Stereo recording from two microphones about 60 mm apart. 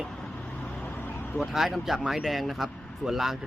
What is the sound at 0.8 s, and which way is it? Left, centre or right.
Vehicle, left.